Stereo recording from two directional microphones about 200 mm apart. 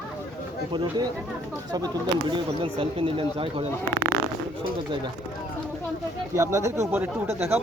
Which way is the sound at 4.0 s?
55° right (ahead or behind).